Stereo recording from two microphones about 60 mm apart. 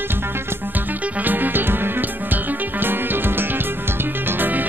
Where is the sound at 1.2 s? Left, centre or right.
Right.